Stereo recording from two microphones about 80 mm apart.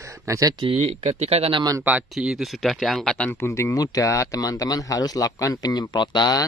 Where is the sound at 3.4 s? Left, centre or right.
Left.